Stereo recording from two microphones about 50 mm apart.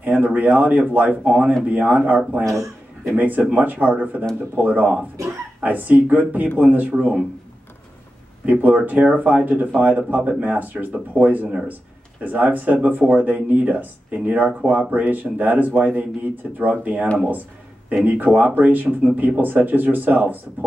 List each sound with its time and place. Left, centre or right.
0.0 s speech: right
2.4 s speech: right
3.2 s speech: right
6.9 s speech: right
8.5 s speech: right